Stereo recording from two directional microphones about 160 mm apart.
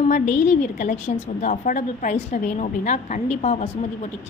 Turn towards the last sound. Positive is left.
turn(degrees=45)  # may be behind; listen again after turning